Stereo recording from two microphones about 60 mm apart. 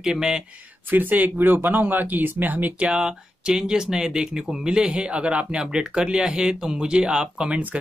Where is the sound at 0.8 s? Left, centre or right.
Right.